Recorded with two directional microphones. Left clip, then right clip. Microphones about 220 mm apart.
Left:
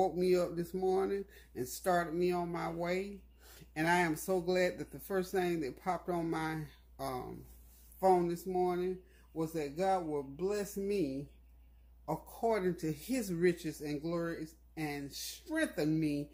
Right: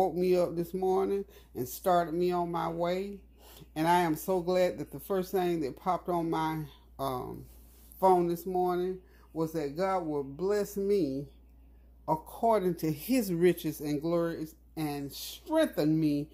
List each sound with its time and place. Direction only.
0.0 s speech: 20° right (ahead or behind)